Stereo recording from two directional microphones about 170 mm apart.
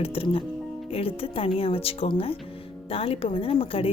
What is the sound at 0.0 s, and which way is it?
Speech, 35° left (ahead or behind).